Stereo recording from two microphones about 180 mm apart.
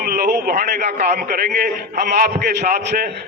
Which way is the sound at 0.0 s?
55° right (ahead or behind).